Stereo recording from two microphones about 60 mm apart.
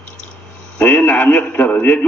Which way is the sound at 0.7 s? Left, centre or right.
Left.